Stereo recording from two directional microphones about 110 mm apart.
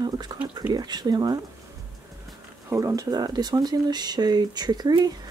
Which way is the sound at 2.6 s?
25° right (ahead or behind).